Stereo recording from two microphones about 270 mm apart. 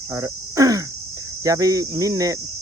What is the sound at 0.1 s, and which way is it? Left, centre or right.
Speech, centre.